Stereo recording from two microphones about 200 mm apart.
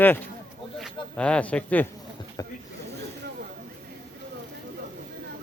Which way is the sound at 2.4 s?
20° left (ahead or behind).